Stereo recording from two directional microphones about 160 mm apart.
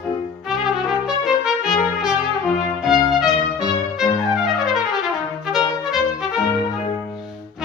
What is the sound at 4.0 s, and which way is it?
Trumpet, 5° right (ahead or behind).